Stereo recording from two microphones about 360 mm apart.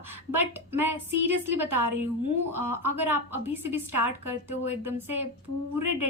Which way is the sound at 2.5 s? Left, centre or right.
Right.